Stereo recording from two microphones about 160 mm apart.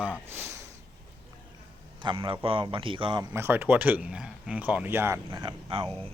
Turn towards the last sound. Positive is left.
turn(degrees=10)  # may be behind; listen again after turning